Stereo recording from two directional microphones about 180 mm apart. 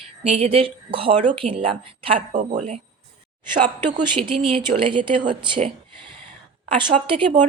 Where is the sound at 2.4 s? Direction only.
40° right (ahead or behind).